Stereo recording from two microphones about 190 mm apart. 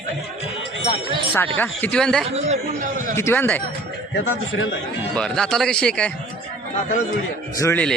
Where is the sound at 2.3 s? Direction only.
40° right (ahead or behind).